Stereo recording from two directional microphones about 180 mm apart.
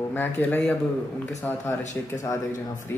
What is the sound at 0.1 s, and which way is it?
Speech, 10° left (ahead or behind).